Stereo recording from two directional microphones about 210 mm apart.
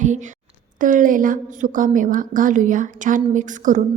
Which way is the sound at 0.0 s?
35° right (ahead or behind).